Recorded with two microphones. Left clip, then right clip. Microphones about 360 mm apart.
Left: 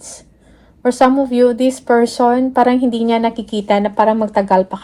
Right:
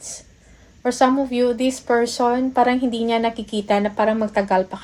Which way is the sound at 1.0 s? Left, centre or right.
Centre.